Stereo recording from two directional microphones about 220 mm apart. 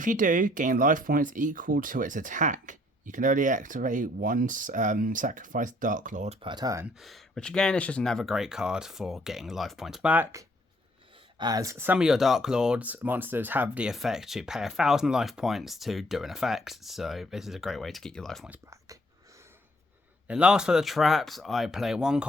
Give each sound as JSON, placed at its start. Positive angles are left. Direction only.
{"t": 0.0, "sound": "speech", "side_deg": -35}
{"t": 7.0, "sound": "speech", "side_deg": 0}
{"t": 11.3, "sound": "speech", "side_deg": -15}
{"t": 20.2, "sound": "speech", "side_deg": -5}